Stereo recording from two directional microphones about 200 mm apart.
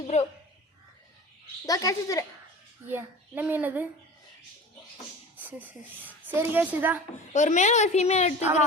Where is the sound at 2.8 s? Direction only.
10° right (ahead or behind).